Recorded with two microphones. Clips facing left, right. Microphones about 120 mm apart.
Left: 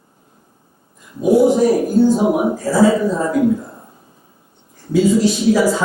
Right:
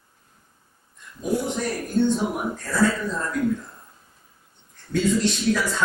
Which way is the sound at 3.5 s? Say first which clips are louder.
Left 8 dB; 35° left (ahead or behind).